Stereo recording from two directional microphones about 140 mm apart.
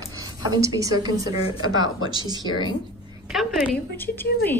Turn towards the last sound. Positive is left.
turn(degrees=15)  # may be behind; listen again after turning